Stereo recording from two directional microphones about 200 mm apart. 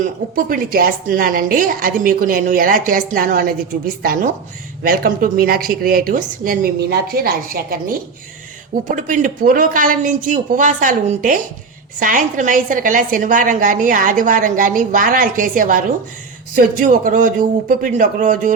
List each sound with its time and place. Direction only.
0.0 s a woman's voice: 45° right (ahead or behind)